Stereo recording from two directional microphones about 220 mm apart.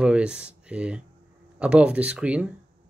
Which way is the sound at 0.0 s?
5° right (ahead or behind).